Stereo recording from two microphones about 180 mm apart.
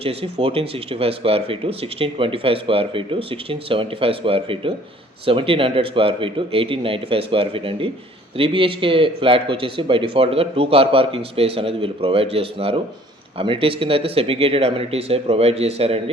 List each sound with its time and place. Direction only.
0.0 s speech: 30° right (ahead or behind)